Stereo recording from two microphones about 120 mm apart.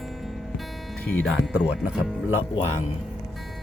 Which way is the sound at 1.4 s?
5° right (ahead or behind).